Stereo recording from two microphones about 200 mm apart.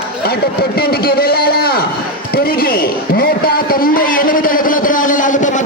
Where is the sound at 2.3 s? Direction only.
50° left (ahead or behind).